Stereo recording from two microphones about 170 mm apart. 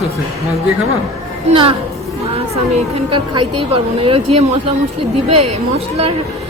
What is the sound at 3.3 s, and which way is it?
Speech, 35° right (ahead or behind).